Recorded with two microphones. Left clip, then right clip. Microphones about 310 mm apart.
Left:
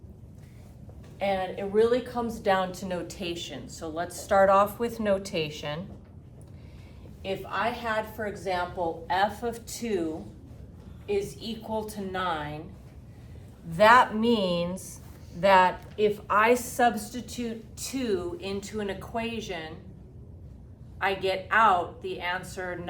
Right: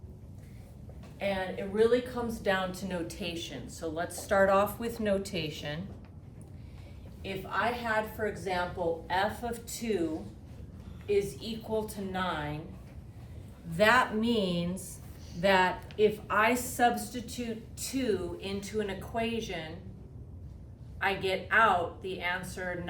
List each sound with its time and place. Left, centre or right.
1.2 s a woman's voice: centre
7.5 s a woman's voice: centre
11.0 s a woman's voice: centre
13.7 s a woman's voice: centre
21.0 s a woman's voice: centre